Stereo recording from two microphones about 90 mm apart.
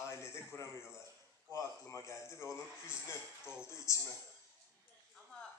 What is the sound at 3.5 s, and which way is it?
Speech, 30° left (ahead or behind).